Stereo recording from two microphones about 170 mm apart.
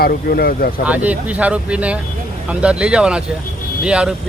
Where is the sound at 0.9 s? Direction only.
10° right (ahead or behind).